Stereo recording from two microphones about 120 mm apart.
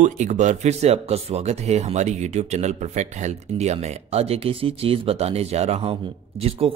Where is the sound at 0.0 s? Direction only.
85° right.